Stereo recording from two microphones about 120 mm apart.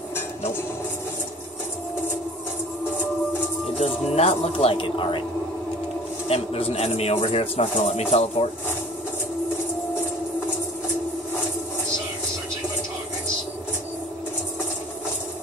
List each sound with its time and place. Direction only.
3.7 s speech: 60° left (ahead or behind)
6.2 s a man's voice: 55° left (ahead or behind)